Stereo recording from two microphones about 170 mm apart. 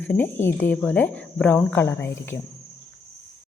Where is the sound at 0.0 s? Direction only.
10° left (ahead or behind).